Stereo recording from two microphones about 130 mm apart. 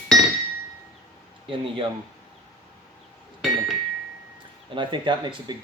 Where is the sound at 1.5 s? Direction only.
40° right (ahead or behind).